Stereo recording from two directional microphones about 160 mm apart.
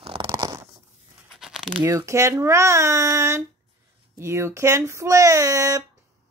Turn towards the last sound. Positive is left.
turn(degrees=-20)  # may be behind; listen again after turning